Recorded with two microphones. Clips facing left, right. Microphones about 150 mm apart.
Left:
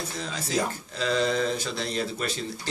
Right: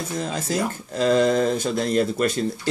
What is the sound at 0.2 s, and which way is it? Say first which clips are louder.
Speech: right 3 dB; 45° right (ahead or behind).